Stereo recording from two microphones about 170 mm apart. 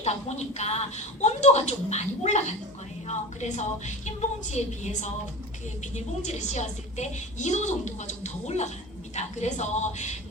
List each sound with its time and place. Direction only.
0.0 s a woman's voice: 40° left (ahead or behind)